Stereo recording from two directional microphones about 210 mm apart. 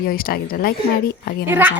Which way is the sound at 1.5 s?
10° right (ahead or behind).